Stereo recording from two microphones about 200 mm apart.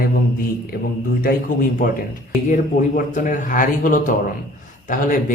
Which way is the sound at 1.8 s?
40° left (ahead or behind).